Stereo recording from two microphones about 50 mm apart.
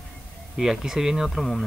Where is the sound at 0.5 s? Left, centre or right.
Centre.